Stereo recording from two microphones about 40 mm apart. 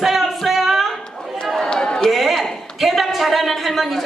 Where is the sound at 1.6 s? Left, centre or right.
Centre.